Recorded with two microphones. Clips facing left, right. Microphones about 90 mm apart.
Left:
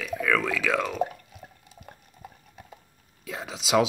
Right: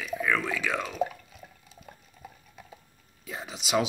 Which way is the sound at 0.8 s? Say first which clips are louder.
Left 2 dB; 55° left (ahead or behind).